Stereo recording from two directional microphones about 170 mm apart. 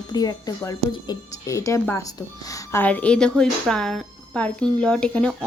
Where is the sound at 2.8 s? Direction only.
10° left (ahead or behind).